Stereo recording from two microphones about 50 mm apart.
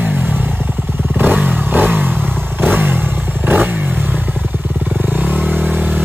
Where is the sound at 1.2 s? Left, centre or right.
Right.